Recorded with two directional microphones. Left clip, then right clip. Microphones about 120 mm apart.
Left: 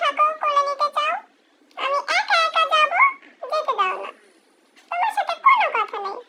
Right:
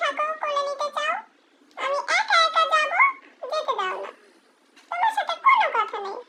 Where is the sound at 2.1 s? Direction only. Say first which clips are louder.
Right 1 dB; 50° left (ahead or behind).